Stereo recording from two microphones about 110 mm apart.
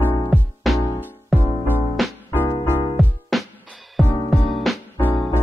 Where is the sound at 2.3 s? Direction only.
25° left (ahead or behind).